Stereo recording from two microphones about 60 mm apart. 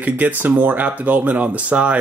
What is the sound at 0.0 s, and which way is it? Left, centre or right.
Speech, right.